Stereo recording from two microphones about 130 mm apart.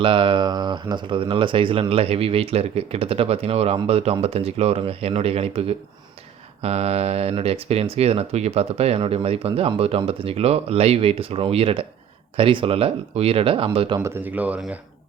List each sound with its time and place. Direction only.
0.0 s speech: 40° right (ahead or behind)
14.0 s speech: 15° right (ahead or behind)